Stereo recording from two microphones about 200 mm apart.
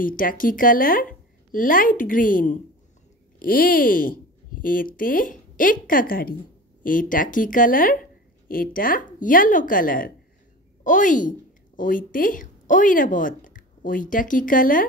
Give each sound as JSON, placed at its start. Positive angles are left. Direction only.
{"t": 0.0, "sound": "a woman's voice", "side_deg": 45}